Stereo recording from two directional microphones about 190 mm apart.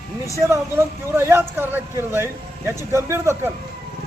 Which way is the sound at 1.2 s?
15° right (ahead or behind).